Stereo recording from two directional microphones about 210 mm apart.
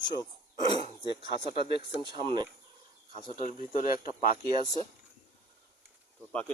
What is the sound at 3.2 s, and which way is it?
Speech, 40° left (ahead or behind).